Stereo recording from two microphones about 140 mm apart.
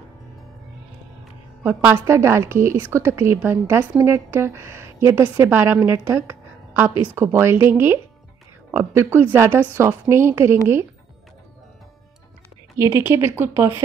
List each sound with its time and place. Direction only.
1.6 s a woman's voice: 15° right (ahead or behind)
12.7 s a woman's voice: 20° right (ahead or behind)